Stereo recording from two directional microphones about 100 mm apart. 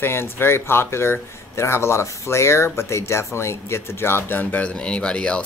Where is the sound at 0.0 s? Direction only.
25° left (ahead or behind).